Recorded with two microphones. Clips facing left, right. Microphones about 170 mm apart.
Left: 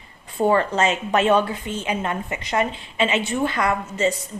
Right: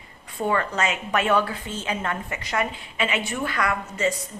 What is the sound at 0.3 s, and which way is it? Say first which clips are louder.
A woman's voice: left 6 dB; 30° left (ahead or behind).